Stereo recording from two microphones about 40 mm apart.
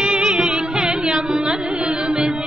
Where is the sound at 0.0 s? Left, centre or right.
Centre.